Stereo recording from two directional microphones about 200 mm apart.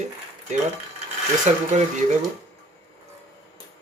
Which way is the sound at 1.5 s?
35° right (ahead or behind).